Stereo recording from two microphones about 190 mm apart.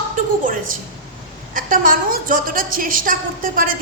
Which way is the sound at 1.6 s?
45° right (ahead or behind).